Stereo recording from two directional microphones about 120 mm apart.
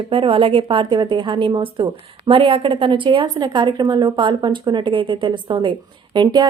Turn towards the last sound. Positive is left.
turn(degrees=-40)  # may be behind; listen again after turning